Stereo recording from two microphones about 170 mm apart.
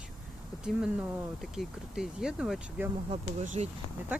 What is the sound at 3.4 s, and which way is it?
Speech, 45° right (ahead or behind).